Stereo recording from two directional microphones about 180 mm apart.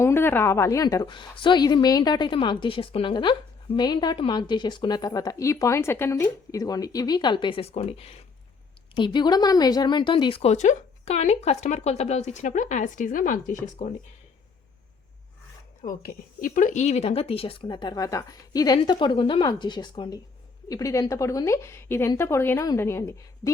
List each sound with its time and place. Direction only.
0.0 s a woman's voice: 15° left (ahead or behind); by 13.9 s 40° left (ahead or behind)
15.8 s a woman's voice: 50° left (ahead or behind); by 23.5 s 15° left (ahead or behind)